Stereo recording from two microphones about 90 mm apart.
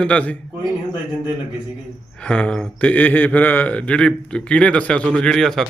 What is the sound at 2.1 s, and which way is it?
A man's voice, 10° left (ahead or behind).